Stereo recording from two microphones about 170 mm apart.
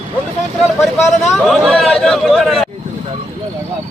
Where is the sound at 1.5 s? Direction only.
Centre (ahead or behind).